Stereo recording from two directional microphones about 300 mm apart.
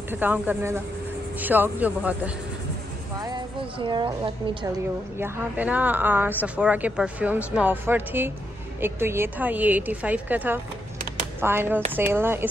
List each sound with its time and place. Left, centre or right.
0.1 s a woman's voice: centre